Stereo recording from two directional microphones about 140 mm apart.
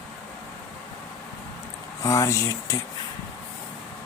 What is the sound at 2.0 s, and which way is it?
Speech, 20° left (ahead or behind).